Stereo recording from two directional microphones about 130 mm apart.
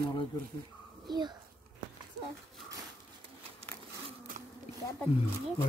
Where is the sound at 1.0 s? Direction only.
35° right (ahead or behind).